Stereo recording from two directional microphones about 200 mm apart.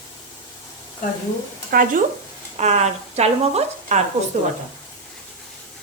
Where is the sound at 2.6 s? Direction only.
35° right (ahead or behind).